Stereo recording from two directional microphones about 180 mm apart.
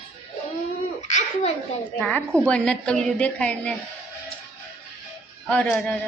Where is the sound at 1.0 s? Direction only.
40° left (ahead or behind).